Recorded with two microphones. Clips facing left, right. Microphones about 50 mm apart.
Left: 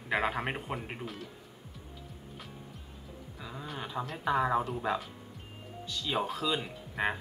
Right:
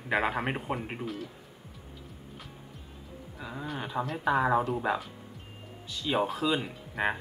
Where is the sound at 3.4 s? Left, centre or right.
Centre.